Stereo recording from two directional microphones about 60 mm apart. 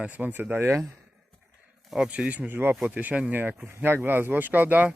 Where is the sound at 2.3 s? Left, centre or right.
Right.